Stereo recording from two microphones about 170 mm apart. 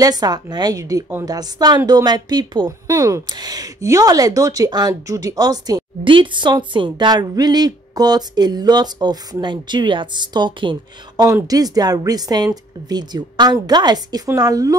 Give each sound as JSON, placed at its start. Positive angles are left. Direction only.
{"t": 0.0, "sound": "a woman's voice", "side_deg": -25}